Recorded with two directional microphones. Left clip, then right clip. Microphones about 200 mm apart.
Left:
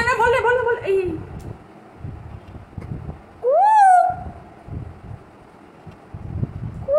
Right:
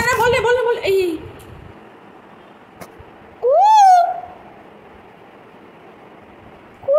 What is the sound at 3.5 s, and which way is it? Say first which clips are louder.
Cat: right 3 dB; 20° right (ahead or behind).